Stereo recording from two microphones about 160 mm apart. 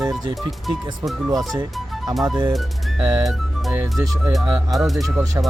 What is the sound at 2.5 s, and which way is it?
Music, centre (ahead or behind).